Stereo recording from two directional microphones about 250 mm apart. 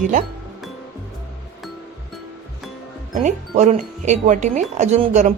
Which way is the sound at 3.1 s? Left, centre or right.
Right.